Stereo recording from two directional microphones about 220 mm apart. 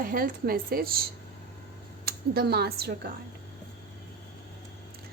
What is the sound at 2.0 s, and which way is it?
A woman's voice, 45° right (ahead or behind).